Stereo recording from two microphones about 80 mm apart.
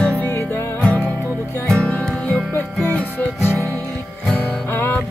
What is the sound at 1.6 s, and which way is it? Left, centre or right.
Music, centre.